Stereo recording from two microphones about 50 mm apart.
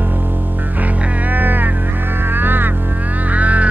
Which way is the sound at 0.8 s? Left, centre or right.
Right.